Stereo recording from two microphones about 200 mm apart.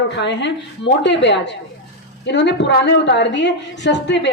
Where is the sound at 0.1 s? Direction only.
60° left (ahead or behind).